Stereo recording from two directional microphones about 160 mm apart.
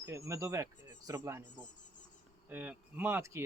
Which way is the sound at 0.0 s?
20° right (ahead or behind).